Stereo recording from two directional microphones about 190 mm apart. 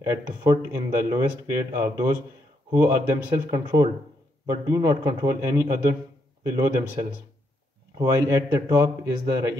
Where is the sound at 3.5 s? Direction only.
20° right (ahead or behind).